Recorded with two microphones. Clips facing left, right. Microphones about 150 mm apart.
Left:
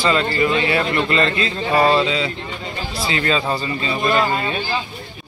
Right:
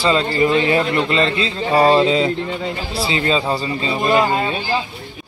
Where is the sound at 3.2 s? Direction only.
20° right (ahead or behind).